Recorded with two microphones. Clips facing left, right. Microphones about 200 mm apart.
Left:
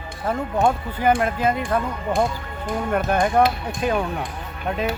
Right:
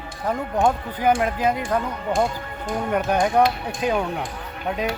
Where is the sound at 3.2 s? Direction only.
Centre (ahead or behind).